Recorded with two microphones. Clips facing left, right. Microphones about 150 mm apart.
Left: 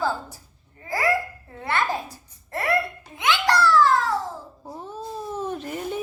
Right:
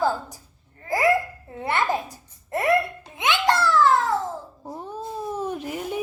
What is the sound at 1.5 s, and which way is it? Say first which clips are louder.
Babbling: right 2 dB; 20° right (ahead or behind).